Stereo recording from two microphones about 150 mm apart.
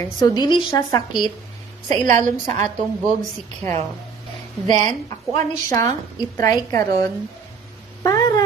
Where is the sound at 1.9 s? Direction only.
45° right (ahead or behind).